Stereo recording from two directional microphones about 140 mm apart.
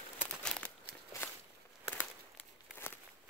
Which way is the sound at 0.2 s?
10° left (ahead or behind).